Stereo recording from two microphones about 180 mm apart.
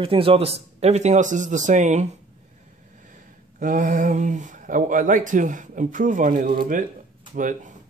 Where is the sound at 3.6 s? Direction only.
50° right (ahead or behind).